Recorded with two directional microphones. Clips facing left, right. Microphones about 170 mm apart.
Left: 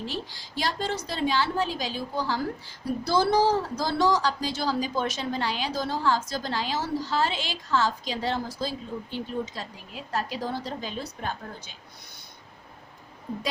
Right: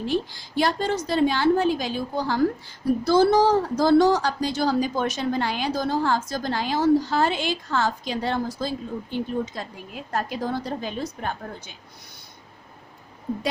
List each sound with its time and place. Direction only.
0.1 s a woman's voice: 55° right (ahead or behind)